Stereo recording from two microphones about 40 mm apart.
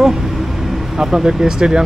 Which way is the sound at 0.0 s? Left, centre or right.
Centre.